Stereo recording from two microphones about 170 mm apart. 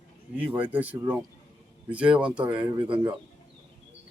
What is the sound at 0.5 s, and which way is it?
Speech, 10° right (ahead or behind).